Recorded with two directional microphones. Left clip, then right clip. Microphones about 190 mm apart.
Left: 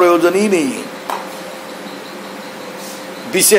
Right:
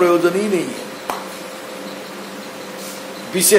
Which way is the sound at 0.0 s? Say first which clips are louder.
Left 3 dB; 35° left (ahead or behind).